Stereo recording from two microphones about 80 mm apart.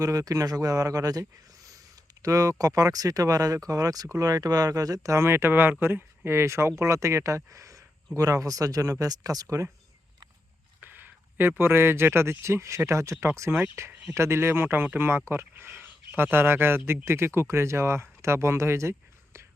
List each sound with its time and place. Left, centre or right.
0.0 s speech: right
2.2 s speech: right
10.8 s a man's voice: right